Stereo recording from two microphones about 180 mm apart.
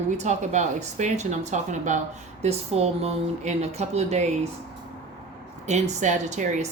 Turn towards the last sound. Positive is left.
turn(degrees=-40)  # may be behind; listen again after turning